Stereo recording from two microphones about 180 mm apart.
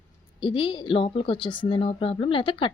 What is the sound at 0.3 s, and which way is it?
Speech, 30° left (ahead or behind).